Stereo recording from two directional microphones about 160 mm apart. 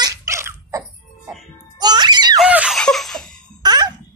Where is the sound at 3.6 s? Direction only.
25° right (ahead or behind).